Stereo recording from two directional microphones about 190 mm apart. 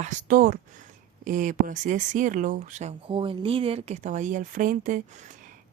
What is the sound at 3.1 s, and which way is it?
Speech, 25° right (ahead or behind).